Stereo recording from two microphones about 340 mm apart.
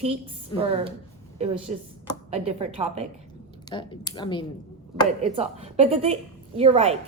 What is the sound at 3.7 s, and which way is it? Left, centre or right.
Speech, centre.